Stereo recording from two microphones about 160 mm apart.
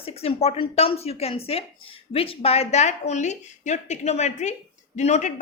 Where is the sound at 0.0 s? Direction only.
35° left (ahead or behind).